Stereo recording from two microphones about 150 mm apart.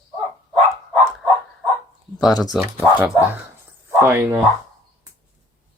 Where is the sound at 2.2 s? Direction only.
25° left (ahead or behind).